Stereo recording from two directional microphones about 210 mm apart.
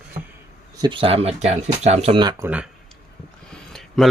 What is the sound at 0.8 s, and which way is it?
Speech, 25° right (ahead or behind).